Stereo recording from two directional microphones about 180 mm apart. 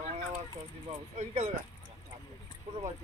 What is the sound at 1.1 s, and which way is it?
Speech, 40° right (ahead or behind).